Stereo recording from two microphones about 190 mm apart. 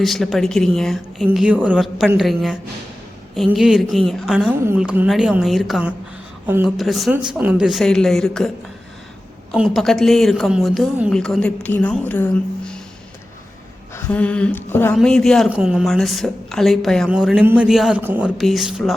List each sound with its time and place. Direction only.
0.0 s a woman's voice: centre (ahead or behind)
9.5 s a woman's voice: centre (ahead or behind)
13.9 s a woman's voice: 5° left (ahead or behind)